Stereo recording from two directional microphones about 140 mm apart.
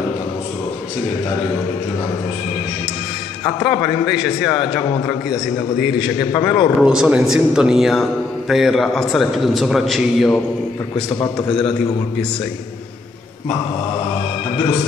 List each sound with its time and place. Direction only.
4.0 s a man's voice: 5° right (ahead or behind)
4.6 s a man's voice: 40° left (ahead or behind)
5.8 s a man's voice: 5° right (ahead or behind)
6.3 s a man's voice: 40° left (ahead or behind)
6.8 s a man's voice: 5° right (ahead or behind)
11.3 s a man's voice: 5° left (ahead or behind)